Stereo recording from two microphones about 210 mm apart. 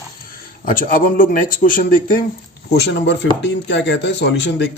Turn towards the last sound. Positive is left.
turn(degrees=55)  # may be behind; listen again after turning